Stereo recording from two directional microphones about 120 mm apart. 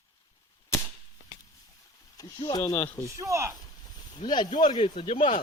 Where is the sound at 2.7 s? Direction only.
15° left (ahead or behind).